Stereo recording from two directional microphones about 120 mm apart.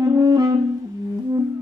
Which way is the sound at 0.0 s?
30° right (ahead or behind).